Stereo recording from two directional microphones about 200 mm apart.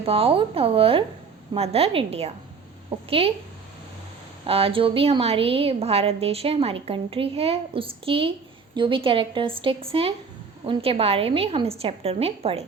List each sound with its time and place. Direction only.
0.0 s a woman's voice: 30° right (ahead or behind)
4.4 s a woman's voice: 30° right (ahead or behind)